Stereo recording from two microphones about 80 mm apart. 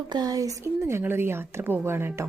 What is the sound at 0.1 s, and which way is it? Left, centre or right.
Speech, right.